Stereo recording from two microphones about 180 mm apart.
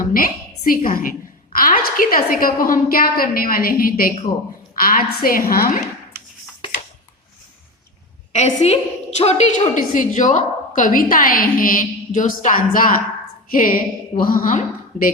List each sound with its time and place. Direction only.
0.0 s a woman's voice: 50° left (ahead or behind)
8.3 s a woman's voice: 40° left (ahead or behind)